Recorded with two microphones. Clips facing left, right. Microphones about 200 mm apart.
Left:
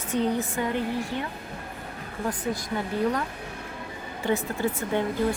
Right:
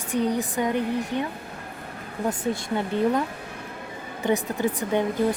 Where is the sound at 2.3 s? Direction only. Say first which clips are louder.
Right 2 dB; 25° right (ahead or behind).